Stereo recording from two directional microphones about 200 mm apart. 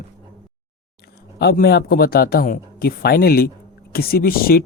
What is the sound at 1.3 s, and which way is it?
Speech, 55° left (ahead or behind).